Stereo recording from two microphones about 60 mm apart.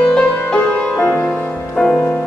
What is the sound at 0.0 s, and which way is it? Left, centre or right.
Music, centre.